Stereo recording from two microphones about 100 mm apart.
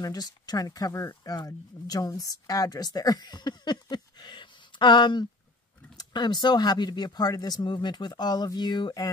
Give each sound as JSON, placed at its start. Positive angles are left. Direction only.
{"t": 0.0, "sound": "speech", "side_deg": 40}